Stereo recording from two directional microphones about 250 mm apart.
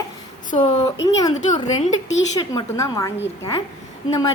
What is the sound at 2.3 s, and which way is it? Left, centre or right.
Speech, centre.